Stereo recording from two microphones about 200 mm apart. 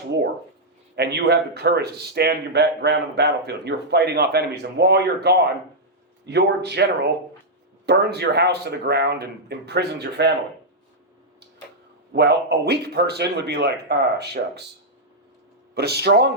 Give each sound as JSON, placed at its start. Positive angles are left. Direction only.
{"t": 0.9, "sound": "speech", "side_deg": -55}
{"t": 7.9, "sound": "speech", "side_deg": -55}
{"t": 12.1, "sound": "speech", "side_deg": -55}
{"t": 15.7, "sound": "speech", "side_deg": -55}